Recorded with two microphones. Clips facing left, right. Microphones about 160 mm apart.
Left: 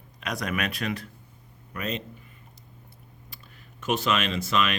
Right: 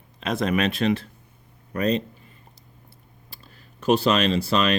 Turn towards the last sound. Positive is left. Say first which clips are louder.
# right 5 dB
turn(degrees=-35)  # may be behind; listen again after turning